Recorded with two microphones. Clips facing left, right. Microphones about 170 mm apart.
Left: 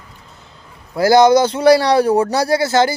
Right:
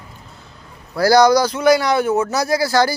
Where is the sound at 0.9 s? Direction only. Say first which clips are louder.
Left 2 dB; 20° left (ahead or behind).